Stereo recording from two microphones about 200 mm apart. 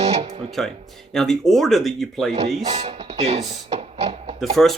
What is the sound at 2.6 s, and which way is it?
Speech, 35° right (ahead or behind).